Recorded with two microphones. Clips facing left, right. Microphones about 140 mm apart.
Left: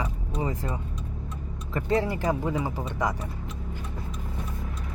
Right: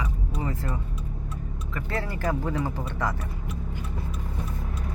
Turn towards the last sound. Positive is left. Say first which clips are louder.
# left 1 dB
turn(degrees=15)  # may be behind; listen again after turning